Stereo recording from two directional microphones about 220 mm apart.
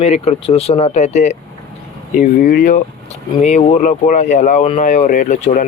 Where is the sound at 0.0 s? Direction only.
30° left (ahead or behind).